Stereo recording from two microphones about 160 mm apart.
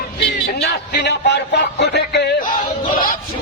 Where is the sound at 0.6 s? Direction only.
90° left.